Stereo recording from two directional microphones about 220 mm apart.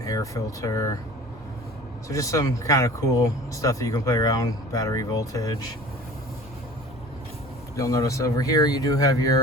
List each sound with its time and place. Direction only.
0.0 s speech: 15° left (ahead or behind)
2.0 s speech: 15° left (ahead or behind)
7.8 s speech: 15° left (ahead or behind)